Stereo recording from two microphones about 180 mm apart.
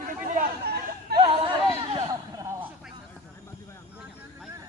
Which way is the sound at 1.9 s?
15° right (ahead or behind).